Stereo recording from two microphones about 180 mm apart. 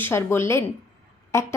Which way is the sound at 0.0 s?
15° left (ahead or behind).